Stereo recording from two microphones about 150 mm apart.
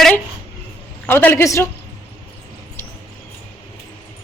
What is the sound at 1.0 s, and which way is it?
Speech, 15° left (ahead or behind).